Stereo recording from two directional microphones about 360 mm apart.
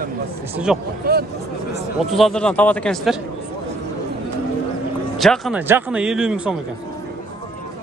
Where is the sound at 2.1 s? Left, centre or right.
Centre.